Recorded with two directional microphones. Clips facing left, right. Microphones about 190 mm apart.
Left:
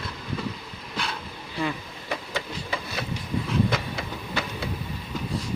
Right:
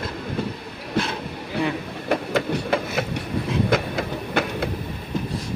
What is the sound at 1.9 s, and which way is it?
Train, 60° right (ahead or behind).